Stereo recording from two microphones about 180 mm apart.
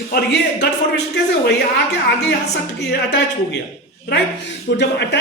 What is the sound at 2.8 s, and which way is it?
Speech, 75° left (ahead or behind).